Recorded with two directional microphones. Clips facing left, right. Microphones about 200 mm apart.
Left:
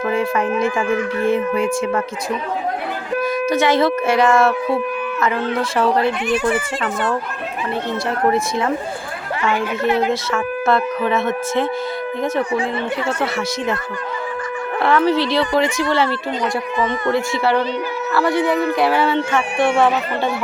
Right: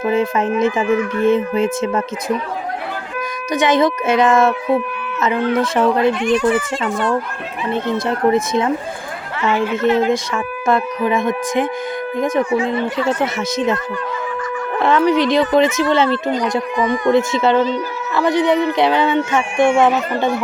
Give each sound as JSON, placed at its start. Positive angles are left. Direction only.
{"t": 0.0, "sound": "speech", "side_deg": -20}
{"t": 3.5, "sound": "speech", "side_deg": -20}
{"t": 6.2, "sound": "speech", "side_deg": 10}
{"t": 7.7, "sound": "a woman's voice", "side_deg": -20}
{"t": 9.8, "sound": "speech", "side_deg": 15}
{"t": 10.1, "sound": "speech", "side_deg": -15}
{"t": 13.1, "sound": "speech", "side_deg": -20}
{"t": 14.8, "sound": "speech", "side_deg": -20}